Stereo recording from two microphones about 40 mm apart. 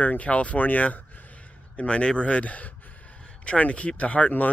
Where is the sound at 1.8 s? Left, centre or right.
Left.